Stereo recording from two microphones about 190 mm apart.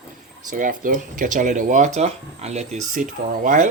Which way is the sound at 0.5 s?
45° right (ahead or behind).